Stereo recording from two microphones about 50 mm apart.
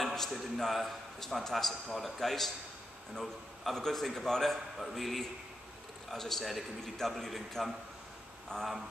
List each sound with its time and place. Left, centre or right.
0.0 s a sound: centre
0.6 s a man's voice: centre
8.5 s a man's voice: centre